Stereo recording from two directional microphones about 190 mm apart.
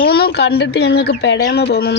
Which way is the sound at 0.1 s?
55° left (ahead or behind).